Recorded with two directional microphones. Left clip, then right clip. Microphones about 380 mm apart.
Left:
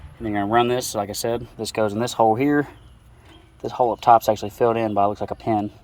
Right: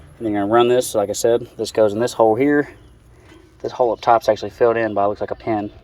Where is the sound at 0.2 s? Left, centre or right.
Centre.